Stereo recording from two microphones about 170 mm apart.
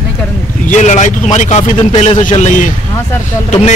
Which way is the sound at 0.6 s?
45° left (ahead or behind).